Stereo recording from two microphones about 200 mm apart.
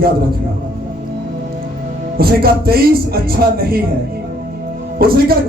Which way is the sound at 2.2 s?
50° right (ahead or behind).